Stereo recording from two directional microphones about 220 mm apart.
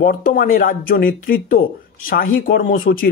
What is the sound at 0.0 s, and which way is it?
Speech, 40° left (ahead or behind).